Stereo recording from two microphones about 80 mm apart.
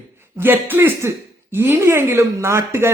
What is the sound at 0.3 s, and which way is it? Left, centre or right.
A man's voice, right.